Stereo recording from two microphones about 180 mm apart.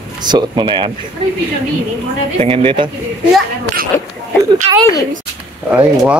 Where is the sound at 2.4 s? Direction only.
30° right (ahead or behind).